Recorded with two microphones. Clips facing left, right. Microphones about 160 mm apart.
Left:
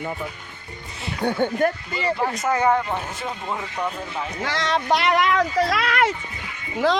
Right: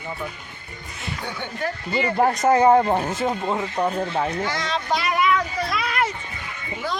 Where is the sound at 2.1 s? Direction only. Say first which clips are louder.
Right 7 dB; 45° right (ahead or behind).